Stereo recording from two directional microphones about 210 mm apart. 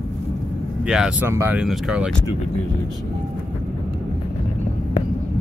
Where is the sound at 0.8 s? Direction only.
5° right (ahead or behind).